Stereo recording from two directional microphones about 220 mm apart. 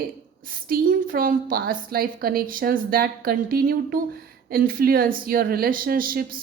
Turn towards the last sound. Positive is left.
turn(degrees=-40)  # may be behind; listen again after turning